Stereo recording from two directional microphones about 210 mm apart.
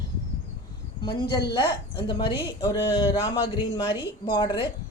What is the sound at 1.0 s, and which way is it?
A woman's voice, 20° left (ahead or behind).